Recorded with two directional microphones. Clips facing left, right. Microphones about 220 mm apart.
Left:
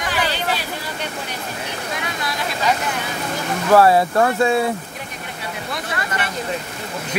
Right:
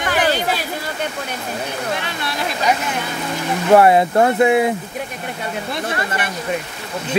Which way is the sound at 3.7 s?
20° right (ahead or behind).